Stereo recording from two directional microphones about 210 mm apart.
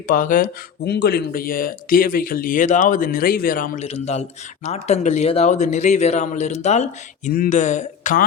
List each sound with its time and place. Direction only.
0.1 s speech: 40° left (ahead or behind)
3.8 s speech: 30° left (ahead or behind)